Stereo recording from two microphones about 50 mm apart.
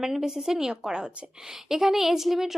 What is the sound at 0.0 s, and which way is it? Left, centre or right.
Speech, centre.